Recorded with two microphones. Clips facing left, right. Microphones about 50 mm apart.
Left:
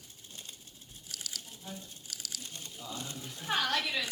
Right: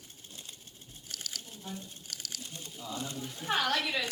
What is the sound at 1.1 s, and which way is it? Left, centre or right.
Sewing machine, right.